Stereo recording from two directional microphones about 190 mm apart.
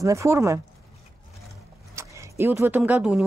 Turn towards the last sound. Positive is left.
turn(degrees=-5)  # may be behind; listen again after turning